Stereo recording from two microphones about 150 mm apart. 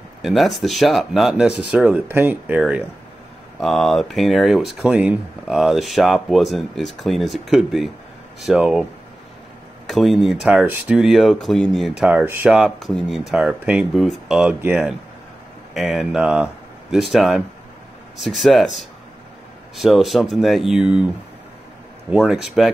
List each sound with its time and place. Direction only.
0.2 s speech: centre (ahead or behind)
3.5 s speech: centre (ahead or behind)
9.8 s speech: centre (ahead or behind)
22.1 s speech: 5° right (ahead or behind)